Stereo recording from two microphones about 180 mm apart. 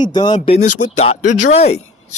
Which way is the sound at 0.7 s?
40° left (ahead or behind).